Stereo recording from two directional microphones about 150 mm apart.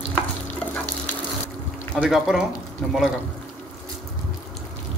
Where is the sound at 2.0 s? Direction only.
Centre (ahead or behind).